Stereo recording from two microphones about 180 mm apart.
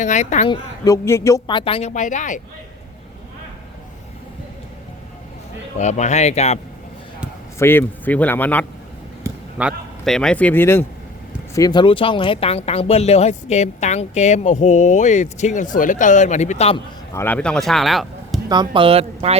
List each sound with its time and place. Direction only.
0.0 s speech: 40° left (ahead or behind)
0.5 s speech: 15° left (ahead or behind)
1.9 s speech: 45° left (ahead or behind)
5.7 s speech: 40° left (ahead or behind)
7.6 s speech: 10° left (ahead or behind)
9.2 s speech: 5° right (ahead or behind); by 16.8 s 35° left (ahead or behind)
17.2 s speech: 10° left (ahead or behind)
18.4 s speech: 25° right (ahead or behind)